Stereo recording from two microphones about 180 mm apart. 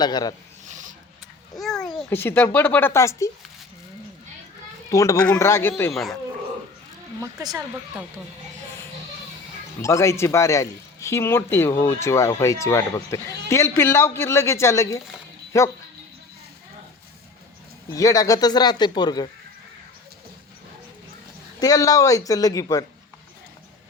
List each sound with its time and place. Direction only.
0.0 s speech: 20° left (ahead or behind)
0.7 s a sound: 45° right (ahead or behind)
1.5 s babbling: centre (ahead or behind)
2.0 s speech: 10° left (ahead or behind)
4.9 s speech: 15° left (ahead or behind)
5.9 s speech: centre (ahead or behind)
7.2 s speech: 20° right (ahead or behind)
9.8 s speech: 15° left (ahead or behind)
17.9 s speech: 20° left (ahead or behind)
21.6 s speech: 20° left (ahead or behind)